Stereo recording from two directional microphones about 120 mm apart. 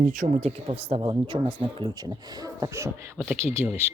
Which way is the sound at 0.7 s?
55° right (ahead or behind).